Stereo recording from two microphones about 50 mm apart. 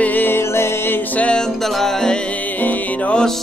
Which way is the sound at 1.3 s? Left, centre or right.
Centre.